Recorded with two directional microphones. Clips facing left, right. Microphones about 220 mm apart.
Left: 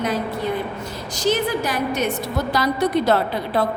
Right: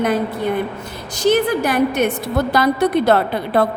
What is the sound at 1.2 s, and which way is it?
A woman's voice, 55° right (ahead or behind).